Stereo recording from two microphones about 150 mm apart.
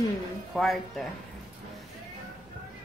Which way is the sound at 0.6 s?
Centre (ahead or behind).